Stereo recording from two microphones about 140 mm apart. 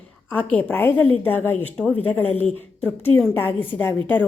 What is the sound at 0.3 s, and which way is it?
A woman's voice, 10° left (ahead or behind).